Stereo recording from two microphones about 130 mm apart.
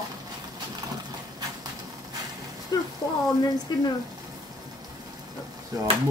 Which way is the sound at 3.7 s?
35° left (ahead or behind).